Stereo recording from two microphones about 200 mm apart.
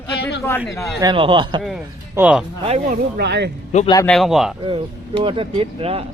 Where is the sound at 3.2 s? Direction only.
55° right (ahead or behind).